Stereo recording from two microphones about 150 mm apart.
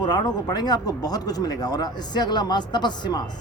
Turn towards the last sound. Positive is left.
turn(degrees=30)  # may be behind; listen again after turning